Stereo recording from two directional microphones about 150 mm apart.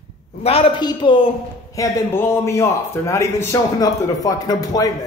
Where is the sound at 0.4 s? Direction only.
40° left (ahead or behind).